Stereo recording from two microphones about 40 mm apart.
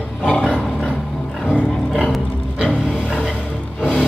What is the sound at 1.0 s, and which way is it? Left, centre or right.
Music, centre.